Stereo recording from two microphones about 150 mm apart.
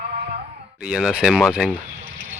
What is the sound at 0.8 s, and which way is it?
Speech, 5° right (ahead or behind).